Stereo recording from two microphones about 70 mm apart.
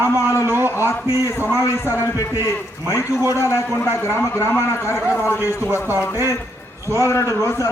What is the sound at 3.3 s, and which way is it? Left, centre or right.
Speech, left.